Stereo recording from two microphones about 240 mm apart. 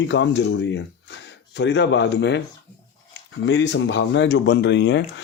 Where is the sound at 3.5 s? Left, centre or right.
Left.